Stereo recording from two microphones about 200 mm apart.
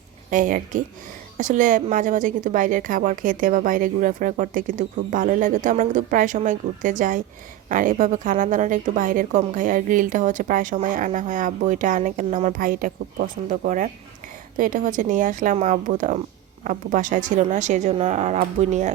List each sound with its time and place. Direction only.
0.3 s a woman's voice: 40° right (ahead or behind)